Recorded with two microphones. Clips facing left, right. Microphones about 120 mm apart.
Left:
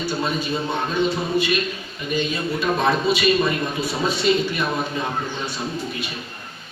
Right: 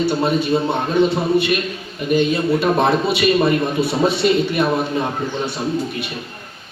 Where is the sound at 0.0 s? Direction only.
65° right (ahead or behind).